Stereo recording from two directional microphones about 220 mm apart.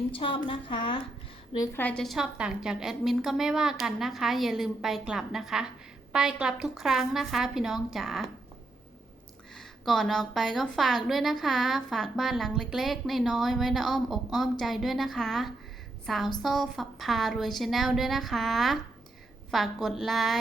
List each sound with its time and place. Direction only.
0.1 s a woman's voice: 25° left (ahead or behind)
1.5 s a woman's voice: 10° left (ahead or behind)
9.6 s a woman's voice: centre (ahead or behind)